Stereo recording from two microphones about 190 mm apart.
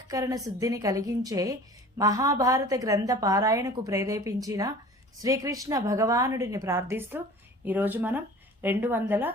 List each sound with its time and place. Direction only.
0.1 s a woman's voice: 20° right (ahead or behind)